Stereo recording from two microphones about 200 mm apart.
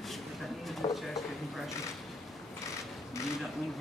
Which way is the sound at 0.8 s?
20° left (ahead or behind).